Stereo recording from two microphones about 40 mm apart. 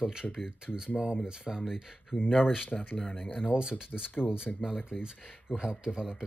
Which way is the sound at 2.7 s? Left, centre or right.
Left.